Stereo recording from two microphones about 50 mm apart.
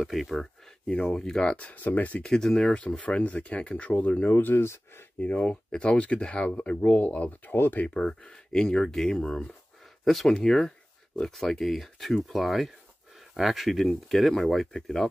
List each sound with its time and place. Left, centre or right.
0.0 s speech: centre
1.1 s speech: centre; by 2.1 s left
2.2 s speech: centre
4.0 s speech: left
4.4 s speech: left
5.2 s speech: left
7.5 s speech: left
7.8 s speech: centre